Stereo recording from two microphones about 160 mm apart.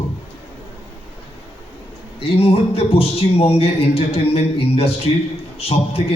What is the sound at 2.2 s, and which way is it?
A man's voice, 40° left (ahead or behind).